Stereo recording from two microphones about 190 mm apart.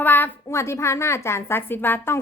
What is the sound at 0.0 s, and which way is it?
A woman's voice, 10° left (ahead or behind).